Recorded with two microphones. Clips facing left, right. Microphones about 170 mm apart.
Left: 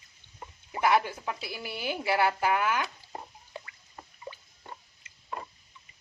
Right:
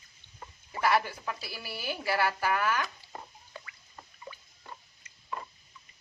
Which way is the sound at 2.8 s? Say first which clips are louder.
Left 2 dB; 30° left (ahead or behind).